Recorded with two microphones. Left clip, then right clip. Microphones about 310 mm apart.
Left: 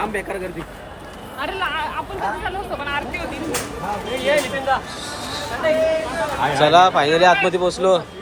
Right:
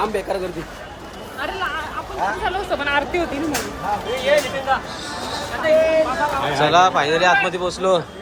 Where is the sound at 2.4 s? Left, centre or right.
Right.